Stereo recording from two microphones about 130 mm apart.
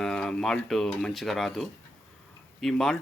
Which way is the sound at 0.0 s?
5° left (ahead or behind).